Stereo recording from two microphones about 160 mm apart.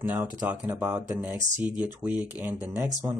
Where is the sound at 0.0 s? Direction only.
10° right (ahead or behind).